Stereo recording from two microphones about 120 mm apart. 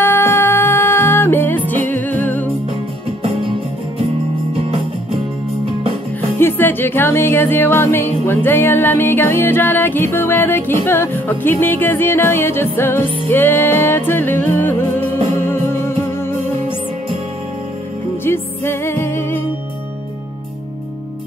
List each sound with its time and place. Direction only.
0.0 s music: 20° left (ahead or behind)
6.3 s music: 20° left (ahead or behind)
18.2 s music: 20° left (ahead or behind)